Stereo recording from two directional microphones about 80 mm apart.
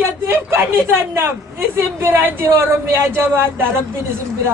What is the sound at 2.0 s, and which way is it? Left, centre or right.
A woman's voice, right.